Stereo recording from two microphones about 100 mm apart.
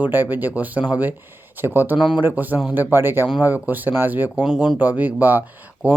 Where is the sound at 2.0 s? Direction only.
5° right (ahead or behind).